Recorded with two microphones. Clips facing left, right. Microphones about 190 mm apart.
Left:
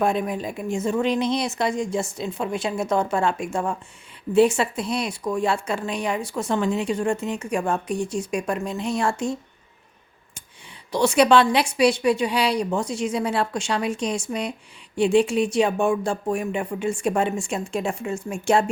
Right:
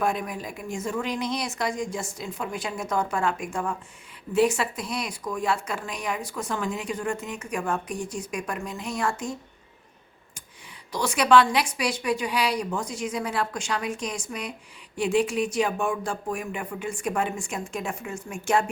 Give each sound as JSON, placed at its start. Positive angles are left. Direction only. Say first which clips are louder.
{"t": 0.0, "sound": "speech", "louder": "left 5 dB", "side_deg": 25}
{"t": 10.9, "sound": "speech", "louder": "left 3 dB", "side_deg": 25}